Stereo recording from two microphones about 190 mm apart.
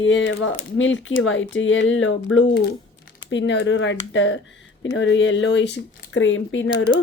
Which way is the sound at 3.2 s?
75° left (ahead or behind).